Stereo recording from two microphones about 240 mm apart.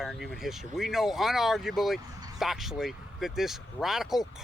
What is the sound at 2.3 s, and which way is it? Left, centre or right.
Speech, centre.